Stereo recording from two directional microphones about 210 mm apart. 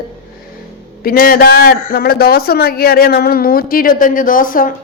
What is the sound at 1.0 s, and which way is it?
A man's voice, 45° left (ahead or behind).